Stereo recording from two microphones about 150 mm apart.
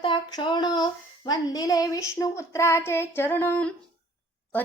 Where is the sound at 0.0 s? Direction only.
30° left (ahead or behind).